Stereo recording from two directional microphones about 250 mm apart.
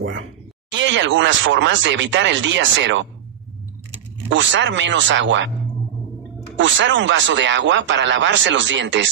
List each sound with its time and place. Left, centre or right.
0.7 s speech: right
4.3 s speech: right
6.6 s speech: right